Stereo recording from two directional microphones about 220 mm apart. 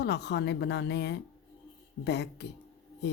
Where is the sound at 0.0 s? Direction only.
50° left (ahead or behind).